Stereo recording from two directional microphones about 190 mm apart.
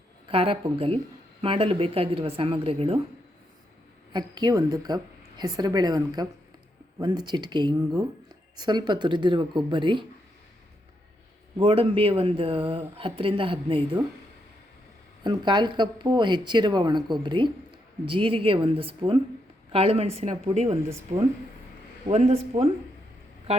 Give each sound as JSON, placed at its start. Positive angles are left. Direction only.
{"t": 0.3, "sound": "speech", "side_deg": -30}
{"t": 4.1, "sound": "speech", "side_deg": -20}
{"t": 11.5, "sound": "speech", "side_deg": -30}
{"t": 15.2, "sound": "speech", "side_deg": -25}